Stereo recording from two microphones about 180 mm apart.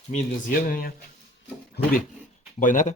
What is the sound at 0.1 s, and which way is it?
Speech, 50° left (ahead or behind).